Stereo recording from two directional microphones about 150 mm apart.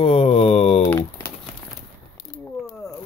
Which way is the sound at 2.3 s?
15° left (ahead or behind).